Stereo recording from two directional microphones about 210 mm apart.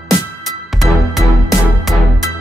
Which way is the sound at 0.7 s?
Centre (ahead or behind).